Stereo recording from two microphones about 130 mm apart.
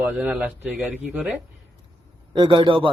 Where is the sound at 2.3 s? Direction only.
35° right (ahead or behind).